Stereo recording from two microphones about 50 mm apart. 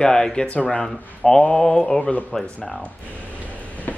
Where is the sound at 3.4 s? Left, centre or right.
Left.